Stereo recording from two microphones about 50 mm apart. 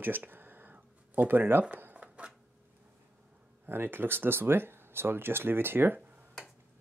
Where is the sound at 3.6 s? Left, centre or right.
Right.